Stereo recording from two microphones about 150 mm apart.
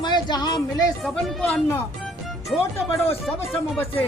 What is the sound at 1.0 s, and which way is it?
Speech, 5° left (ahead or behind).